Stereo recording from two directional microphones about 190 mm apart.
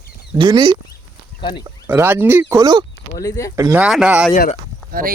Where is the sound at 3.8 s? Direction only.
5° right (ahead or behind).